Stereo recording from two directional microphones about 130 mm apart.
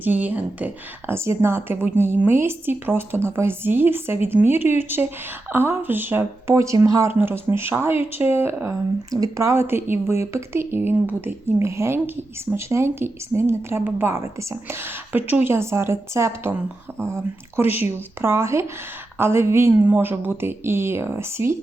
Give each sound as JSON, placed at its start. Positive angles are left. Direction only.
{"t": 0.0, "sound": "speech", "side_deg": -15}
{"t": 17.6, "sound": "speech", "side_deg": -15}